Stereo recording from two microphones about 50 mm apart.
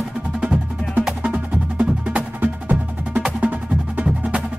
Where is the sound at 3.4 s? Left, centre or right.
Right.